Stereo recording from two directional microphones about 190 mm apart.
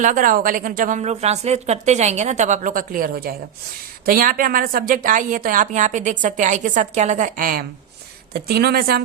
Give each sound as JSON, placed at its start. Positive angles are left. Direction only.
{"t": 0.0, "sound": "a woman's voice", "side_deg": -45}